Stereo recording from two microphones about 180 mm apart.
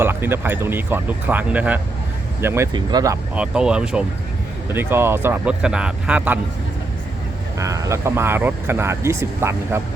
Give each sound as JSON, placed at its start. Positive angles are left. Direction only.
{"t": 0.0, "sound": "speech", "side_deg": -10}
{"t": 3.3, "sound": "speech", "side_deg": -5}
{"t": 7.6, "sound": "speech", "side_deg": -15}